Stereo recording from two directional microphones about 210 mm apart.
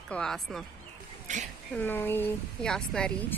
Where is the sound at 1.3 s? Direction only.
35° right (ahead or behind).